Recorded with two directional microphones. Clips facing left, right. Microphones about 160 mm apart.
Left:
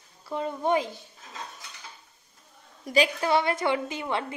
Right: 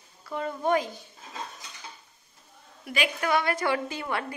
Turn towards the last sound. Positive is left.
turn(degrees=20)  # may be behind; listen again after turning